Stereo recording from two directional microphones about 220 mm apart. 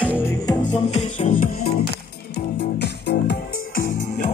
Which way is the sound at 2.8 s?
50° left (ahead or behind).